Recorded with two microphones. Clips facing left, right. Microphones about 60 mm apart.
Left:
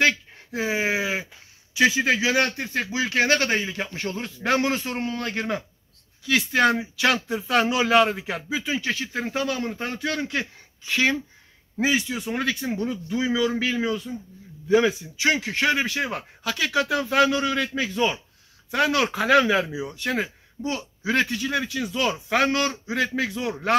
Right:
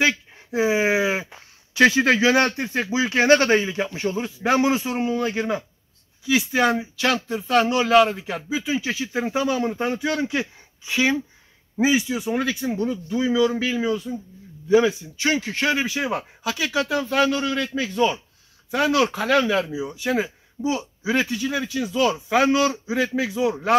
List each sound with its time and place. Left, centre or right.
0.0 s a sound: centre
1.3 s speech: right; by 19.8 s centre
19.8 s speech: centre